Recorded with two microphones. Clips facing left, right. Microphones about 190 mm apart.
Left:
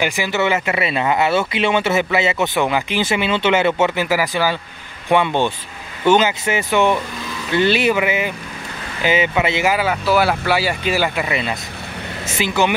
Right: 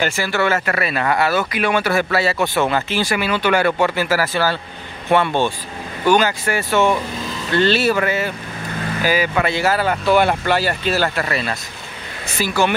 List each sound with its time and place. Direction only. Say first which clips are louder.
0.0 s speech: even; 15° left (ahead or behind)